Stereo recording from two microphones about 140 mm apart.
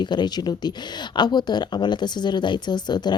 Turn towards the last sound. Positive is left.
turn(degrees=30)  # may be behind; listen again after turning